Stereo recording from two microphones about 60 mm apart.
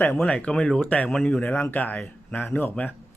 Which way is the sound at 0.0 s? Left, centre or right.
Left.